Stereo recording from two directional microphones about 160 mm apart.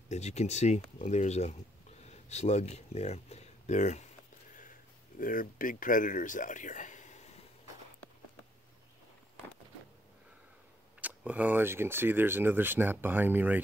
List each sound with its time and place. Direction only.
0.1 s speech: 45° left (ahead or behind)
5.2 s speech: 60° left (ahead or behind)
11.0 s speech: 10° right (ahead or behind)